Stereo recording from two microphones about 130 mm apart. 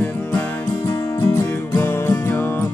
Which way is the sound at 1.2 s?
25° left (ahead or behind).